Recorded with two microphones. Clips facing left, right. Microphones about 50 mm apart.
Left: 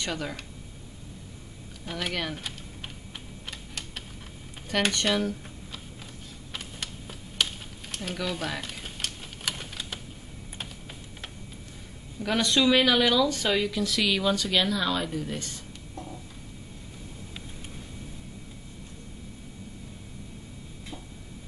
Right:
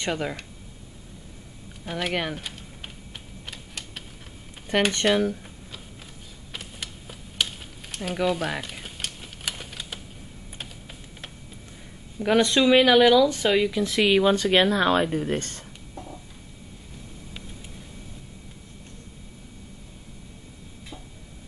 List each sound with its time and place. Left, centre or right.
0.0 s speech: right
1.9 s speech: centre
3.4 s typing: centre
5.0 s speech: centre
6.5 s typing: centre
8.2 s typewriter: centre
12.2 s speech: right
13.8 s speech: right
15.9 s a sound: centre